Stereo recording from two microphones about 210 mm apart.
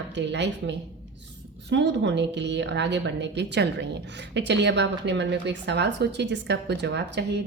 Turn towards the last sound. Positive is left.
turn(degrees=-55)  # may be behind; listen again after turning